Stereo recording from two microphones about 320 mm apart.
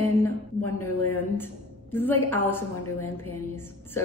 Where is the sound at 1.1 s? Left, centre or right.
Centre.